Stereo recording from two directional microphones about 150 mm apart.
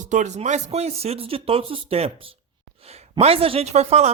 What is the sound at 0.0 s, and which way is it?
A man's voice, 55° right (ahead or behind).